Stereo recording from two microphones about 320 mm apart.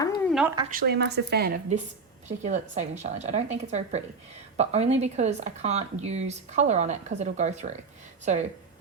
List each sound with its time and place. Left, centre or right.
0.3 s speech: centre
0.7 s speech: right